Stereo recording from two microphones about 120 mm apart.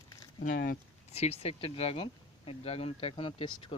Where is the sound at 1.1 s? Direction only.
60° left (ahead or behind).